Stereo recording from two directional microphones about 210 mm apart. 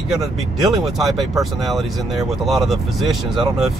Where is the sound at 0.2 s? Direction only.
Centre (ahead or behind).